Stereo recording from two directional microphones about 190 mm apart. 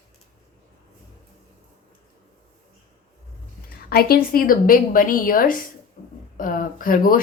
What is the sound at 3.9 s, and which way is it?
A woman's voice, 55° left (ahead or behind).